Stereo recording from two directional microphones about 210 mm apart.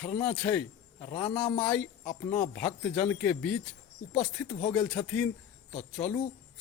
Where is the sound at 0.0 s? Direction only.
5° left (ahead or behind).